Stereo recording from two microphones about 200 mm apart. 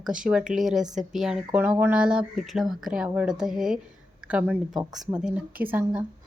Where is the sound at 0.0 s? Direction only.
5° right (ahead or behind).